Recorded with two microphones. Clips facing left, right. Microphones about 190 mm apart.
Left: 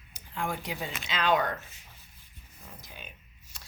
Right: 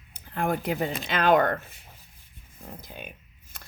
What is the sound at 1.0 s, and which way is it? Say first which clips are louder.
Speech: right 5 dB; 55° right (ahead or behind).